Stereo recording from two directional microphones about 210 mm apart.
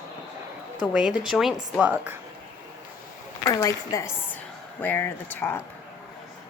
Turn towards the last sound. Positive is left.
turn(degrees=10)  # may be behind; listen again after turning